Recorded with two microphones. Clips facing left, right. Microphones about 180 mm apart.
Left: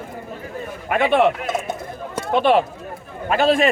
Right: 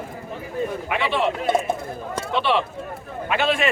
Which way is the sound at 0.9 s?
50° left (ahead or behind).